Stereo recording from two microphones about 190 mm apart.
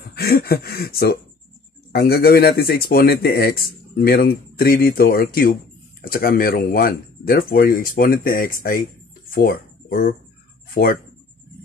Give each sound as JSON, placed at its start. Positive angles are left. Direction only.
{"t": 0.1, "sound": "speech", "side_deg": 55}